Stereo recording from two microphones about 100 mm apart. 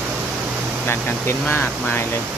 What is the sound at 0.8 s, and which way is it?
Speech, 25° left (ahead or behind).